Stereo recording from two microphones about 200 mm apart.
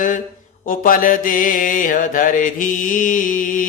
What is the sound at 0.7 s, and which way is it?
Mantra, 45° left (ahead or behind).